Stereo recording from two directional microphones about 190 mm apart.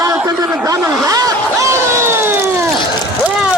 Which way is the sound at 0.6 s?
15° right (ahead or behind).